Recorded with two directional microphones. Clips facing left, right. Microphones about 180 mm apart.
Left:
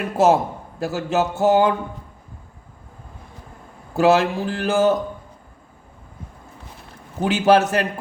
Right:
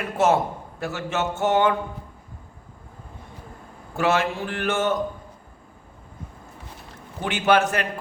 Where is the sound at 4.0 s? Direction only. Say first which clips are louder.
Left 6 dB; 35° left (ahead or behind).